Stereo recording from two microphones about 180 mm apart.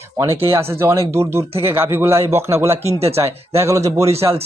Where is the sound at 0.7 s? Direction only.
15° right (ahead or behind).